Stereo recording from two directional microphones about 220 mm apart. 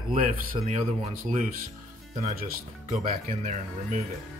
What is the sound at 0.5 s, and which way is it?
Speech, 35° right (ahead or behind).